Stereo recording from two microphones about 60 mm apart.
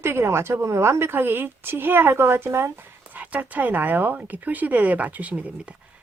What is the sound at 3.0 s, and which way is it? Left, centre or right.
Speech, right.